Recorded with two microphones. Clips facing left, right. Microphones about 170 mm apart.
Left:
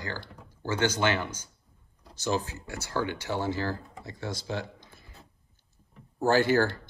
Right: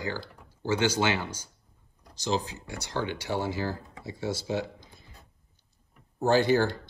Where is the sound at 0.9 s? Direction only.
10° right (ahead or behind).